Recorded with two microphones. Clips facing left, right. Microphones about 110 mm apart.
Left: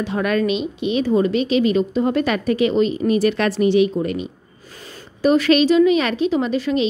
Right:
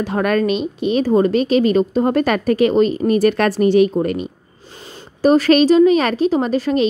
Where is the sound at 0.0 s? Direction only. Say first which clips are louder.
Right 2 dB; 45° right (ahead or behind).